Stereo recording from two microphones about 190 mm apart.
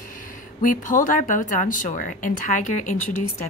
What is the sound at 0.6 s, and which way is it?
A woman's voice, 45° left (ahead or behind).